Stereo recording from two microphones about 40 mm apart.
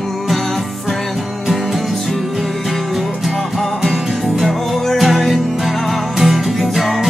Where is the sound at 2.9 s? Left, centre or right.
Centre.